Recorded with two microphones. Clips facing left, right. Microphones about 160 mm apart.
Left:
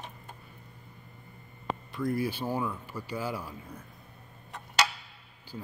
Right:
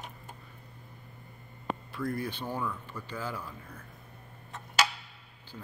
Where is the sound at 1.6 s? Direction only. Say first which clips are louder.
Left 2 dB; centre (ahead or behind).